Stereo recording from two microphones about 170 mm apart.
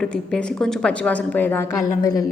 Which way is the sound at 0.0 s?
5° left (ahead or behind).